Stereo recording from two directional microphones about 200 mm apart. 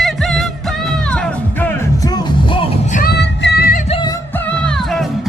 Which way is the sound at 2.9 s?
45° left (ahead or behind).